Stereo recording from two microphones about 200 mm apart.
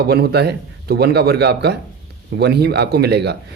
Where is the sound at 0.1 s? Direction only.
55° right (ahead or behind).